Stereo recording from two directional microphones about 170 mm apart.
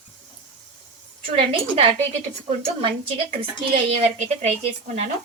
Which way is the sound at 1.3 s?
35° right (ahead or behind).